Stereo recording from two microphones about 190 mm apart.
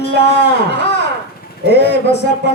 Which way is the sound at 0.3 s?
60° left (ahead or behind).